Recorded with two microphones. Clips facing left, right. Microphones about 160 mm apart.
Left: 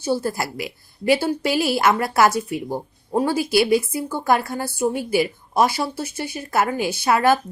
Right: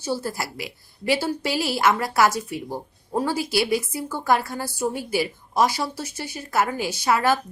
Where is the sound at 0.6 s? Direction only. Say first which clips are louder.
Left 5 dB; 20° left (ahead or behind).